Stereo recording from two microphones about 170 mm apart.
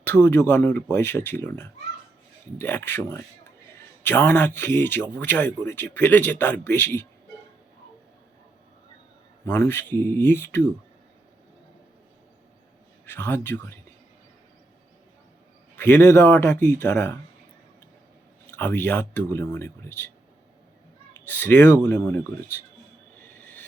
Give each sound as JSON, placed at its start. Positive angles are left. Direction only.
{"t": 0.0, "sound": "speech", "side_deg": 10}
{"t": 9.5, "sound": "speech", "side_deg": 15}
{"t": 13.1, "sound": "speech", "side_deg": 10}
{"t": 15.8, "sound": "speech", "side_deg": 10}
{"t": 18.5, "sound": "speech", "side_deg": 10}
{"t": 21.2, "sound": "speech", "side_deg": 10}